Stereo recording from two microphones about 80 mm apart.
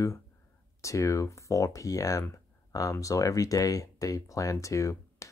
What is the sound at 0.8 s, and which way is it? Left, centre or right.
Speech, left.